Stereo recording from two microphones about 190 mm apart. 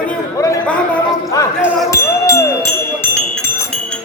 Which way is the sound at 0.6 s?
5° left (ahead or behind).